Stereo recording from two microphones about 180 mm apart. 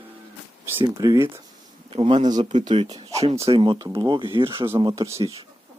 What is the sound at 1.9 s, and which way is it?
A man's voice, 30° right (ahead or behind).